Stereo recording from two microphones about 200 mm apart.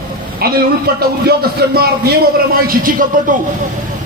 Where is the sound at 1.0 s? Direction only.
50° right (ahead or behind).